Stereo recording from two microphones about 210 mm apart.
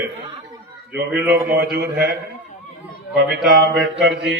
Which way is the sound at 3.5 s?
55° right (ahead or behind).